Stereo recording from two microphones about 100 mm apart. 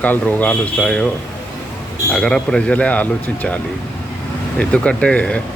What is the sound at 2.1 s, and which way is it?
A man's voice, 5° left (ahead or behind).